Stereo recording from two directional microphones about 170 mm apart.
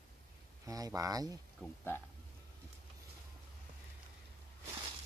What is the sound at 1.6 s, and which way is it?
Speech, 10° left (ahead or behind).